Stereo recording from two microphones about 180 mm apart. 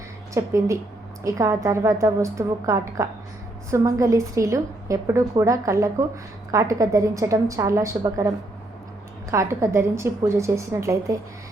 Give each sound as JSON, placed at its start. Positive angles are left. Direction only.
{"t": 0.3, "sound": "a woman's voice", "side_deg": -15}
{"t": 9.3, "sound": "a woman's voice", "side_deg": -15}